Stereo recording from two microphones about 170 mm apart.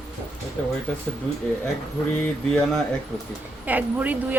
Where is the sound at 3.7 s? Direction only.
10° right (ahead or behind).